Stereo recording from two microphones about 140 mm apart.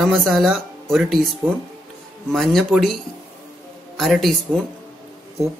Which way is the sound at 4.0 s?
Centre (ahead or behind).